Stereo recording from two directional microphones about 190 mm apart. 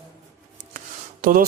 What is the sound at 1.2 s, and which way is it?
Speech, 45° right (ahead or behind).